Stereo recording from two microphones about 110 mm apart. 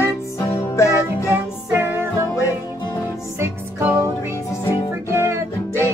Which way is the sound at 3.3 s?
25° right (ahead or behind).